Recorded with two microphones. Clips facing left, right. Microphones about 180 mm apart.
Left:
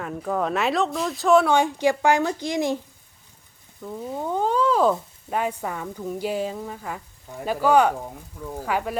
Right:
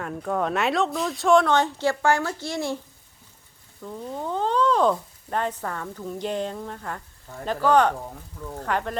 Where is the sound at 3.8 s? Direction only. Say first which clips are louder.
Left 2 dB; 10° left (ahead or behind).